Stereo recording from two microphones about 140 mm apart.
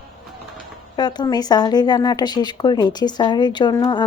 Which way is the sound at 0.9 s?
30° left (ahead or behind).